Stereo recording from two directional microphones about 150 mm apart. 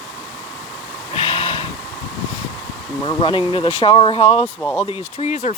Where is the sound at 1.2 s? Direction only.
40° left (ahead or behind).